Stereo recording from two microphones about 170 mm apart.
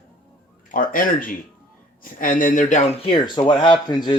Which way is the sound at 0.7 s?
55° left (ahead or behind).